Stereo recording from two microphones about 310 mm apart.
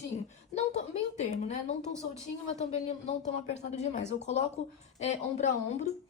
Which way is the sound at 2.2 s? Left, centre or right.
Left.